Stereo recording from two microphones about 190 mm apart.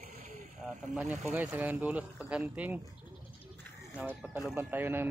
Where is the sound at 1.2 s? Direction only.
5° right (ahead or behind).